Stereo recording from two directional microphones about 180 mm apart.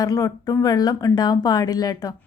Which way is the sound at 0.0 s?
20° left (ahead or behind).